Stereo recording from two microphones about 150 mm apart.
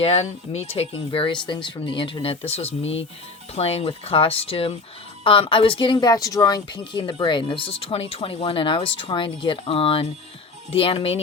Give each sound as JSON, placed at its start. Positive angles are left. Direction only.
{"t": 0.0, "sound": "speech", "side_deg": 45}